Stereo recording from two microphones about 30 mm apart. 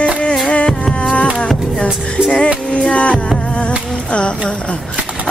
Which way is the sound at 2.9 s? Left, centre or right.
Left.